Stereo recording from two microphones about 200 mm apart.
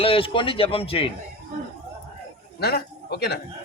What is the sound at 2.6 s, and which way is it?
Speech, 55° left (ahead or behind).